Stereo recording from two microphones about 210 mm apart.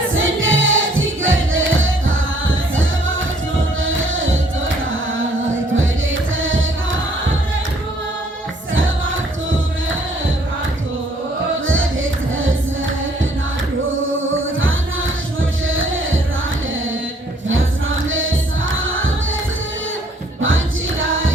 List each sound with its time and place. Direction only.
0.1 s music: 70° right (ahead or behind)
3.8 s music: 70° right (ahead or behind)
5.7 s music: 70° right (ahead or behind)
11.6 s music: 70° right (ahead or behind)
14.2 s music: 70° right (ahead or behind)
17.5 s music: 70° right (ahead or behind)
21.0 s music: 70° right (ahead or behind)